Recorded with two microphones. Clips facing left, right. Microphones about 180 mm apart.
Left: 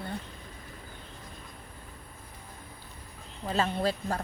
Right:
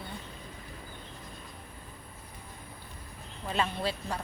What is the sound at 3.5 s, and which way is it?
Speech, 40° left (ahead or behind).